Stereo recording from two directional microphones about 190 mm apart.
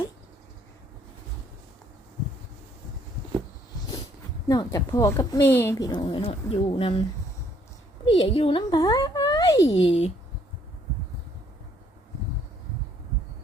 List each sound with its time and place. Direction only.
4.4 s speech: 20° left (ahead or behind)
5.9 s speech: 25° left (ahead or behind)
8.1 s a child's voice: 30° left (ahead or behind)
9.8 s speech: 30° left (ahead or behind)